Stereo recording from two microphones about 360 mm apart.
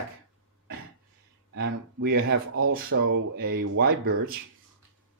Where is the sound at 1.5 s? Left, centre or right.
Right.